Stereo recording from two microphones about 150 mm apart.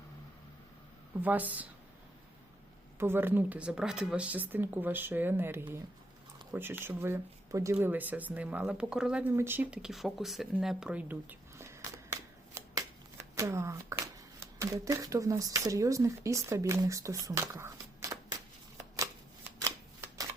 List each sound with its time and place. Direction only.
1.1 s speech: 10° right (ahead or behind)
3.0 s speech: 15° right (ahead or behind)
19.5 s shuffling cards: 20° right (ahead or behind)